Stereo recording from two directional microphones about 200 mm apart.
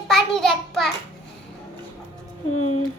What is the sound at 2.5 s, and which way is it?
Speech, 90° left.